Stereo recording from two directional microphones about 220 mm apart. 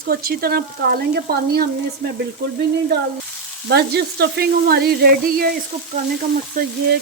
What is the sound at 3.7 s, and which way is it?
Sizzle, 45° right (ahead or behind).